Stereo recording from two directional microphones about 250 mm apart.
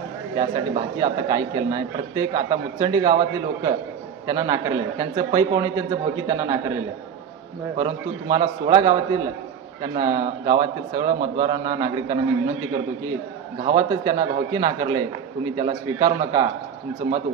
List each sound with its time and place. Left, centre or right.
0.4 s a man's voice: centre
7.7 s a man's voice: centre
13.7 s a man's voice: centre